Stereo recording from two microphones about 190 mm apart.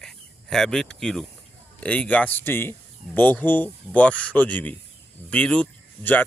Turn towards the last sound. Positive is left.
turn(degrees=10)  # may be behind; listen again after turning